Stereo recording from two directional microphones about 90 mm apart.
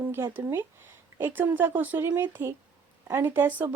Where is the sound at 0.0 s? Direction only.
25° right (ahead or behind).